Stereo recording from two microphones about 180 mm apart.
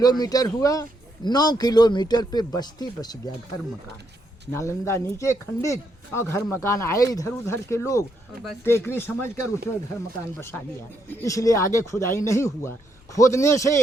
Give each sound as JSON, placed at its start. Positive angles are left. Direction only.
{"t": 0.0, "sound": "a man's voice", "side_deg": 20}
{"t": 4.5, "sound": "speech", "side_deg": 15}
{"t": 11.1, "sound": "speech", "side_deg": 15}